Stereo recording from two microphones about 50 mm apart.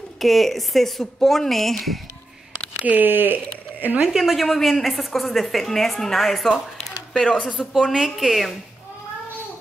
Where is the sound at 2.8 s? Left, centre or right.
Right.